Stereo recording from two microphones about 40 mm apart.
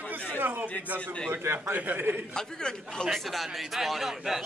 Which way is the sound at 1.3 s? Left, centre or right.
Right.